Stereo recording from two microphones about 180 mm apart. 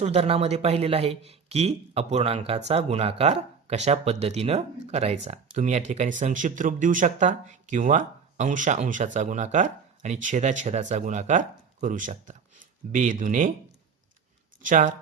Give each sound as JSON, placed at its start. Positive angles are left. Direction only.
{"t": 0.0, "sound": "speech", "side_deg": -35}
{"t": 14.6, "sound": "speech", "side_deg": -45}